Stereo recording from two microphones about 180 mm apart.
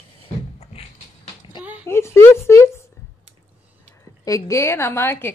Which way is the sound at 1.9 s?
15° left (ahead or behind).